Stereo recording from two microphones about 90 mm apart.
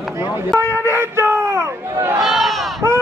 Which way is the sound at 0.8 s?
30° right (ahead or behind).